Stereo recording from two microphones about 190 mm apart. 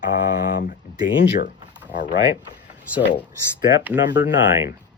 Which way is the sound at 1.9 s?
70° left (ahead or behind).